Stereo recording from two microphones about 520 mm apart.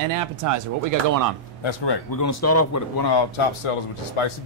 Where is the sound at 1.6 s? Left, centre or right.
Left.